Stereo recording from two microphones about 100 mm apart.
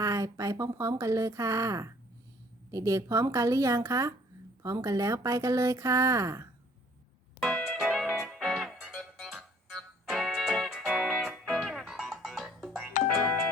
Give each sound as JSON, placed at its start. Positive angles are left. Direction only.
{"t": 0.0, "sound": "speech", "side_deg": -35}
{"t": 7.3, "sound": "music", "side_deg": 5}
{"t": 7.8, "sound": "music", "side_deg": -5}